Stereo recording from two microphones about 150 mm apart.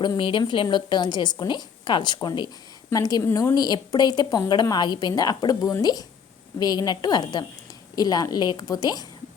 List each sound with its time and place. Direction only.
0.0 s a woman's voice: 30° left (ahead or behind)